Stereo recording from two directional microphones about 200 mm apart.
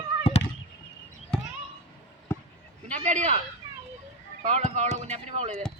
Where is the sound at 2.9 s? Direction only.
35° right (ahead or behind).